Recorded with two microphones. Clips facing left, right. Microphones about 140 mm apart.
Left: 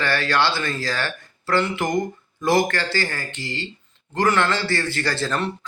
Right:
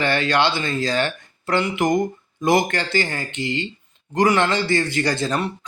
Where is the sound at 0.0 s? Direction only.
20° right (ahead or behind).